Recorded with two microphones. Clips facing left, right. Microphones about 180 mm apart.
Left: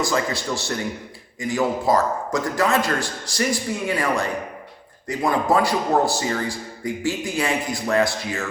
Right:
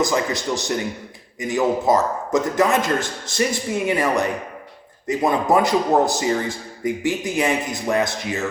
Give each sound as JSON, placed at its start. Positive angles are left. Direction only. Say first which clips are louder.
{"t": 0.0, "sound": "a man's voice", "louder": "right 2 dB", "side_deg": -20}